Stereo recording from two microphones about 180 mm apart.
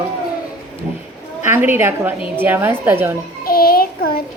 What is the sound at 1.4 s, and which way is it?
Speech, 10° right (ahead or behind).